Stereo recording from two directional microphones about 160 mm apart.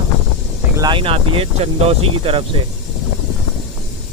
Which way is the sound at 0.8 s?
30° right (ahead or behind).